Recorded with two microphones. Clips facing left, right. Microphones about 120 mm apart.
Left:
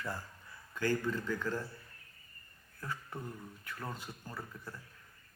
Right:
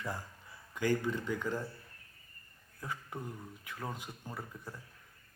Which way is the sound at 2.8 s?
15° right (ahead or behind).